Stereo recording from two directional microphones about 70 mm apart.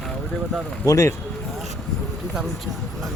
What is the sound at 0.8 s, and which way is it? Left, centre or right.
Speech, left.